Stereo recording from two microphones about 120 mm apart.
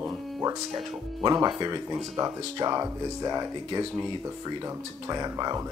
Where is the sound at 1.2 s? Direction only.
35° right (ahead or behind).